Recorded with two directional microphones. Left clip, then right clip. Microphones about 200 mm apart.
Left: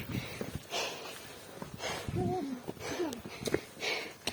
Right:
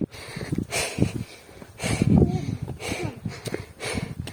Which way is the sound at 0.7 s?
55° right (ahead or behind).